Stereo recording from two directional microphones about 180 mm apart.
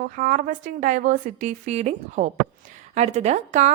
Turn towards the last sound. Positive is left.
turn(degrees=-40)  # may be behind; listen again after turning